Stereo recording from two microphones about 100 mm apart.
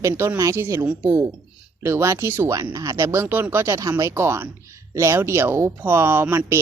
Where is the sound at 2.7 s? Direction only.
35° right (ahead or behind).